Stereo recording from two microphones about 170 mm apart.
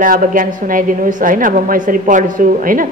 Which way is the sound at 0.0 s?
50° right (ahead or behind).